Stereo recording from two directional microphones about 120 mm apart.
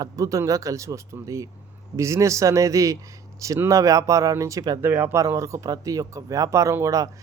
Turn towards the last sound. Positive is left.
turn(degrees=-30)  # may be behind; listen again after turning